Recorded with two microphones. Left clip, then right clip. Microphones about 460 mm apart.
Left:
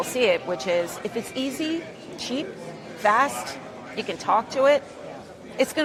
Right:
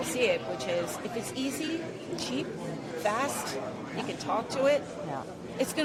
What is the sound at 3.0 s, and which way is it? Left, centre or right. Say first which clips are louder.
A woman's voice: left 10 dB; left.